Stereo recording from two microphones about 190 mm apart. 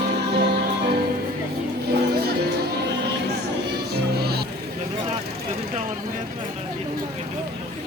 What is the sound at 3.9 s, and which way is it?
Music, 55° right (ahead or behind).